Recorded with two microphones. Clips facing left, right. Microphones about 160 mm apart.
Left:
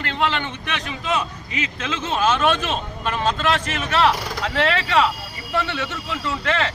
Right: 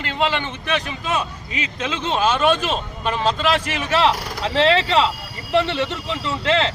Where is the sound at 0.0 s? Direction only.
10° right (ahead or behind).